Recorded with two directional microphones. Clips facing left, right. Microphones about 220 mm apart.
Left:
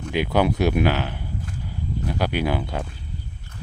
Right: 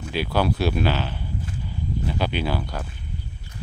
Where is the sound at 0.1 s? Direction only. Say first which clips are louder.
Left 3 dB; 20° left (ahead or behind).